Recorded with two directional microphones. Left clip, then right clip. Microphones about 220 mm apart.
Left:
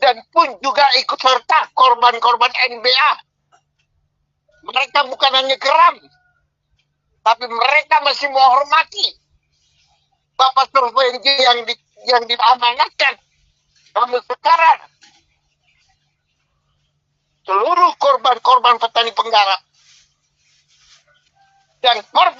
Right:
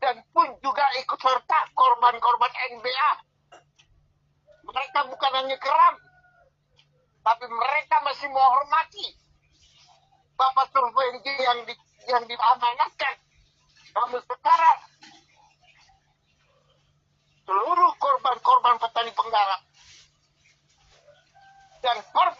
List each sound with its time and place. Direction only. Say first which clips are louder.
0.0 s speech: left 9 dB; 45° left (ahead or behind)
4.6 s speech: left 10 dB; 45° left (ahead or behind)
7.2 s speech: left 8 dB; 45° left (ahead or behind)
10.3 s speech: left 8 dB; 45° left (ahead or behind)
17.4 s speech: left 7 dB; 45° left (ahead or behind)
21.8 s speech: left 9 dB; 45° left (ahead or behind)